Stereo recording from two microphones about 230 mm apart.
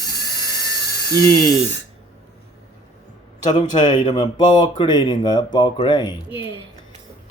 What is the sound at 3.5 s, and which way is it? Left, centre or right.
Speech, centre.